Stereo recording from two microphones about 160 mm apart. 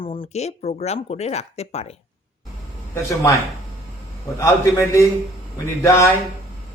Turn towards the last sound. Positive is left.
turn(degrees=15)  # may be behind; listen again after turning